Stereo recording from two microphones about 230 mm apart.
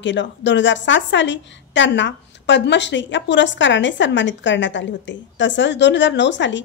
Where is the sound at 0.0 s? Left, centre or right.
Left.